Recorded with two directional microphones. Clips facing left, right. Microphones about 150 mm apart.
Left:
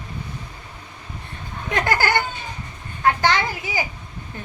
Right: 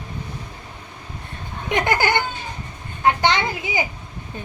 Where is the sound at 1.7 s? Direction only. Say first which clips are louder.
Right 1 dB; 20° right (ahead or behind).